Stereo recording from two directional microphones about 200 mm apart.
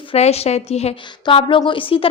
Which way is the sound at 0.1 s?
30° left (ahead or behind).